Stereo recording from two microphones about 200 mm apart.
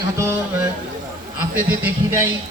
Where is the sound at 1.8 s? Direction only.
10° right (ahead or behind).